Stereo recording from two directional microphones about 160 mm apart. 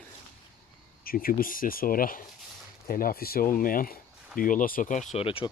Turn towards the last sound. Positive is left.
turn(degrees=35)  # may be behind; listen again after turning